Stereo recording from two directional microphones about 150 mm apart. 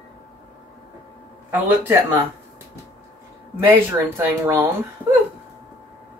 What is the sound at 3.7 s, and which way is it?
Speech, 15° right (ahead or behind).